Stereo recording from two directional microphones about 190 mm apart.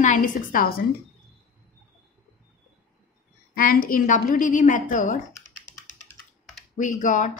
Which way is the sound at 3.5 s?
50° left (ahead or behind).